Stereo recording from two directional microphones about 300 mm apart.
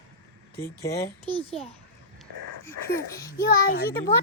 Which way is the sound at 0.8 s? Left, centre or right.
Centre.